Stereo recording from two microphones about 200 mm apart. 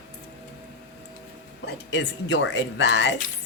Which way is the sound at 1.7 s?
60° left (ahead or behind).